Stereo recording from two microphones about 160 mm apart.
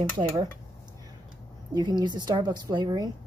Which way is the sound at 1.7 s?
25° right (ahead or behind).